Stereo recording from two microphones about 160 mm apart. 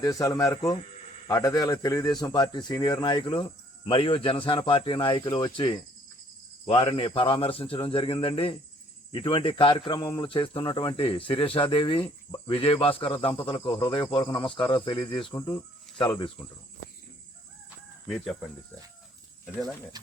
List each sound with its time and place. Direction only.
0.0 s a man's voice: 20° left (ahead or behind)
18.1 s speech: centre (ahead or behind)